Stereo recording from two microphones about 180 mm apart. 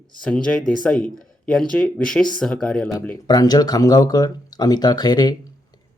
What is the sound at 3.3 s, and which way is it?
Speech, 20° left (ahead or behind).